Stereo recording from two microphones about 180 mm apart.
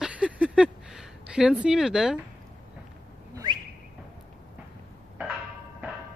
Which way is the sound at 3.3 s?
25° right (ahead or behind).